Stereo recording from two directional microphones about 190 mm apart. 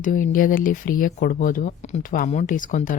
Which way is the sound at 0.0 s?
45° left (ahead or behind).